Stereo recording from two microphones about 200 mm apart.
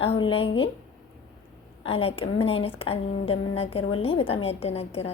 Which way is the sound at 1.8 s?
30° left (ahead or behind).